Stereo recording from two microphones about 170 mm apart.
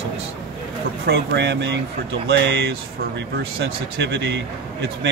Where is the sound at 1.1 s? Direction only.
85° right.